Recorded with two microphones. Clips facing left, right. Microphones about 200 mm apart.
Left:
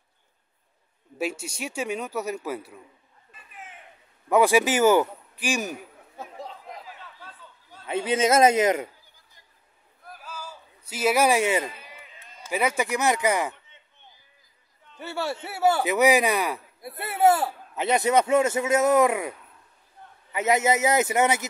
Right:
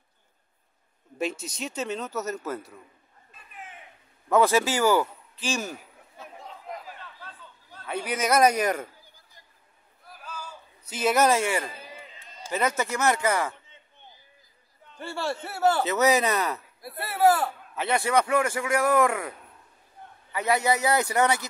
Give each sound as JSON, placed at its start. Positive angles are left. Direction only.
{"t": 1.1, "sound": "a man's voice", "side_deg": 10}
{"t": 4.3, "sound": "a man's voice", "side_deg": 15}
{"t": 7.8, "sound": "speech", "side_deg": 25}
{"t": 10.2, "sound": "a sound", "side_deg": 5}
{"t": 11.7, "sound": "a sound", "side_deg": -30}
{"t": 12.4, "sound": "a man's voice", "side_deg": 10}
{"t": 15.0, "sound": "a man's voice", "side_deg": 5}
{"t": 15.8, "sound": "speech", "side_deg": 15}
{"t": 20.3, "sound": "speech", "side_deg": 20}